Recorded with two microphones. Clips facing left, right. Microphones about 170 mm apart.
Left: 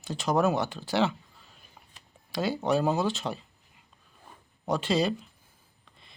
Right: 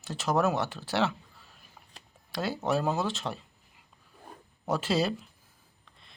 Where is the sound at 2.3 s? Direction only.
Centre (ahead or behind).